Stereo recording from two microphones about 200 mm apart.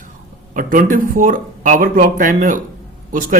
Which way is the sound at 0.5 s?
45° right (ahead or behind).